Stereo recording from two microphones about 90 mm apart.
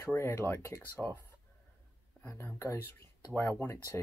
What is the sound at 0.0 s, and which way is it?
Speech, 25° left (ahead or behind).